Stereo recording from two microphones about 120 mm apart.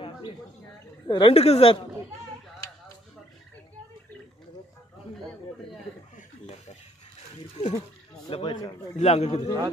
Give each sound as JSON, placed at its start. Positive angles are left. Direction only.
{"t": 1.0, "sound": "a woman's voice", "side_deg": 40}
{"t": 1.3, "sound": "a man's voice", "side_deg": 60}
{"t": 7.5, "sound": "speech", "side_deg": 75}
{"t": 8.3, "sound": "speech", "side_deg": 45}
{"t": 8.9, "sound": "a man's voice", "side_deg": 65}